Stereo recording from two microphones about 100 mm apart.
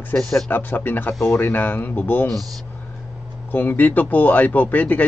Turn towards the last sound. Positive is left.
turn(degrees=15)  # may be behind; listen again after turning